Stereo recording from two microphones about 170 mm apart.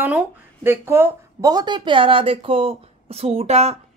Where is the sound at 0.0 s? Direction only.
10° right (ahead or behind).